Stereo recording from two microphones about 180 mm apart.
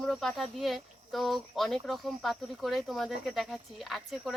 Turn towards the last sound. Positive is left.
turn(degrees=0)  # may be behind; listen again after turning